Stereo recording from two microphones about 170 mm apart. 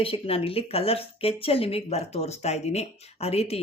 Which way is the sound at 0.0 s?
35° left (ahead or behind).